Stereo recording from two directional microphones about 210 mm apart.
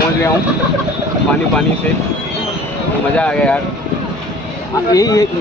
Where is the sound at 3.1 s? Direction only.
5° left (ahead or behind).